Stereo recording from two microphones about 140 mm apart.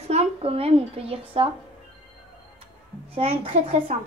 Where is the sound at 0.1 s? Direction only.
45° right (ahead or behind).